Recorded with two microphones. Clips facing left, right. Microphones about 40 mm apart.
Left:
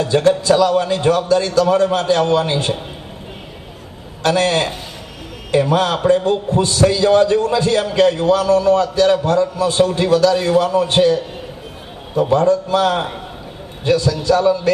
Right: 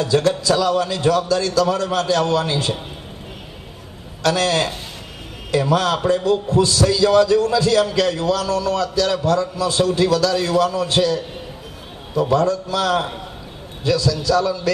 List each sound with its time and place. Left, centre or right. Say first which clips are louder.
0.0 s a man's voice: left 3 dB; left
4.2 s a man's voice: left 2 dB; left
12.2 s a man's voice: left 3 dB; left